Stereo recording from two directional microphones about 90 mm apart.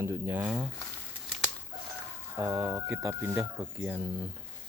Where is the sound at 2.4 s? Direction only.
35° right (ahead or behind).